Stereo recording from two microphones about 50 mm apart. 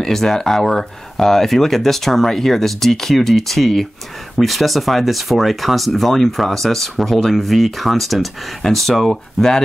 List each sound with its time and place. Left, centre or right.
0.0 s speech: centre